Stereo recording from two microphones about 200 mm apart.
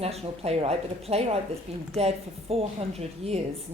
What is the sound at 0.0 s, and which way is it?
A woman's voice, 30° right (ahead or behind).